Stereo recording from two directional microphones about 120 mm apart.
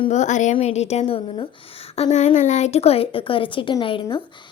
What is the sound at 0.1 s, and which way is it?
Speech, 90° left.